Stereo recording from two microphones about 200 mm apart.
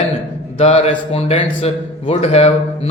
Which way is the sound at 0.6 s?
30° left (ahead or behind).